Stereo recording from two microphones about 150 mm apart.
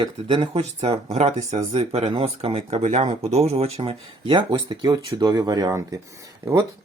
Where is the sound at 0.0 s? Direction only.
35° right (ahead or behind).